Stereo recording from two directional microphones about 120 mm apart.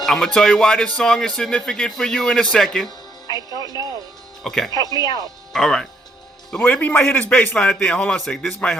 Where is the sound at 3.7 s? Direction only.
30° right (ahead or behind).